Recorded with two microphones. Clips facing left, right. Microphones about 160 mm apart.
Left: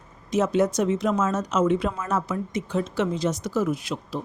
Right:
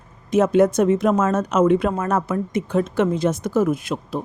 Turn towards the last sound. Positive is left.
turn(degrees=-50)  # may be behind; listen again after turning